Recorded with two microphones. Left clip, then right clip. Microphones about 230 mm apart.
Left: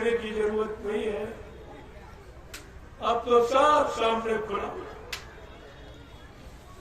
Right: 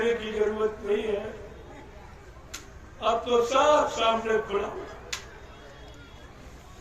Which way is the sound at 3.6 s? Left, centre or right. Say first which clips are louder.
Even; left.